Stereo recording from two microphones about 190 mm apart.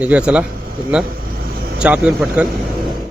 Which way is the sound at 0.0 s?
5° right (ahead or behind).